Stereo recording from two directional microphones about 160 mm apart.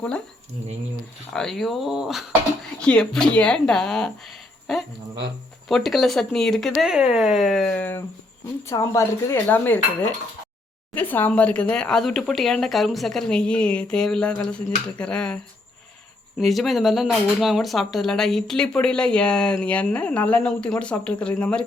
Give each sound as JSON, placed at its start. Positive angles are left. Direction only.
{"t": 1.3, "sound": "speech", "side_deg": 0}
{"t": 16.4, "sound": "speech", "side_deg": 0}